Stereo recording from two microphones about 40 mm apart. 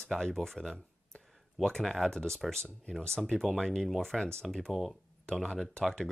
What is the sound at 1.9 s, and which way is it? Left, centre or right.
Speech, centre.